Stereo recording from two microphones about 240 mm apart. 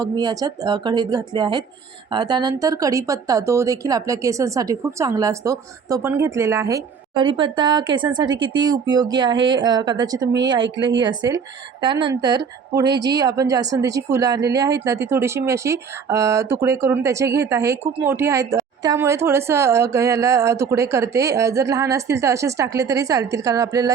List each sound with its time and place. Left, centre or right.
0.0 s speech: centre